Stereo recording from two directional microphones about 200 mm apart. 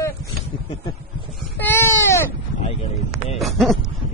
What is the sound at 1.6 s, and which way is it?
Baby cry, 10° left (ahead or behind).